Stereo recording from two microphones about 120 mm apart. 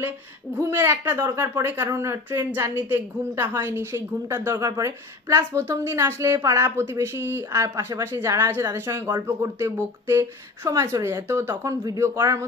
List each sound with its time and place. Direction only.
0.6 s a woman's voice: 20° right (ahead or behind)